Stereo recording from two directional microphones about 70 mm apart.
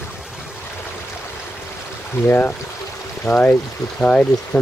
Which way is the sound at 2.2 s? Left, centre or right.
Left.